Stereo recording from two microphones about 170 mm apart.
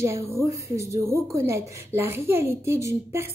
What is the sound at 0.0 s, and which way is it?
Speech, 15° right (ahead or behind).